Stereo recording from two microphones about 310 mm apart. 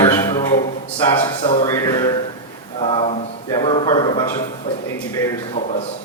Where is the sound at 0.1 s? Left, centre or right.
Centre.